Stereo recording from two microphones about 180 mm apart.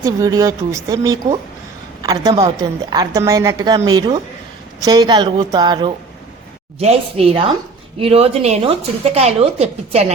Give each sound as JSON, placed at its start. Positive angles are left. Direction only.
{"t": 0.0, "sound": "a woman's voice", "side_deg": -20}